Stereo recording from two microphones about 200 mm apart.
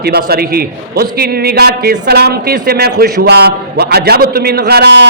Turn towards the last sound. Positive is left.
turn(degrees=-55)  # may be behind; listen again after turning